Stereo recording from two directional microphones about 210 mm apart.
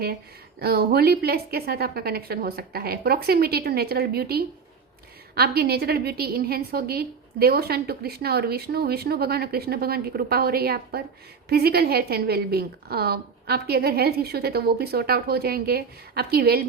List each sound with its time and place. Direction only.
0.6 s a woman's voice: 50° right (ahead or behind)